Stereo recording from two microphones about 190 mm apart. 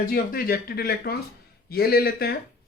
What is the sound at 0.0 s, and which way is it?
Speech, 50° left (ahead or behind).